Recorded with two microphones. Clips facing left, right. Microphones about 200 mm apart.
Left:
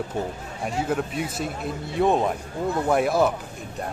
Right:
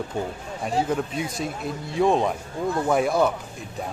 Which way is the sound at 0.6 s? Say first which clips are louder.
Right 1 dB; 5° left (ahead or behind).